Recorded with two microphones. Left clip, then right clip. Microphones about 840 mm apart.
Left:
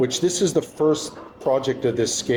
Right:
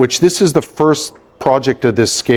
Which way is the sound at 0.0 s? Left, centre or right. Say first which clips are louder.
Right 9 dB; right.